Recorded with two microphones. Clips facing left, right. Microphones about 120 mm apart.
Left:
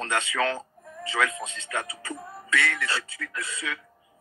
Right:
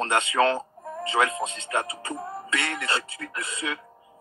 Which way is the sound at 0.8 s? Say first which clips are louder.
Right 6 dB; 50° right (ahead or behind).